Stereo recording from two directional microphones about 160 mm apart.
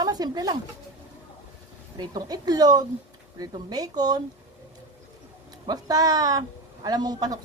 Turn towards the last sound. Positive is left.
turn(degrees=-25)  # may be behind; listen again after turning